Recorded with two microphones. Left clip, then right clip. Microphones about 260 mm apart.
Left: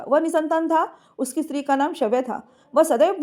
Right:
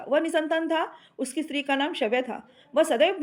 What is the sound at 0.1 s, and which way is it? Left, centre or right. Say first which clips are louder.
Speech: left 4 dB; left.